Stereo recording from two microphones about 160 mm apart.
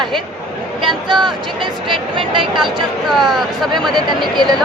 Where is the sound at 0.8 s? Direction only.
30° right (ahead or behind).